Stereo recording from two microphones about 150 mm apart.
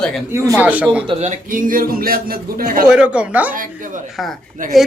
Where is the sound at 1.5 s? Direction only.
65° right (ahead or behind).